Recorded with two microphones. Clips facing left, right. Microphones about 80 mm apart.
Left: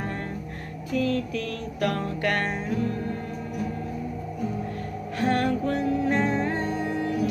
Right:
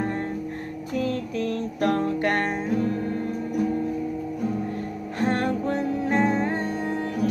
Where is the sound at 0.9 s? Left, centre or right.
Right.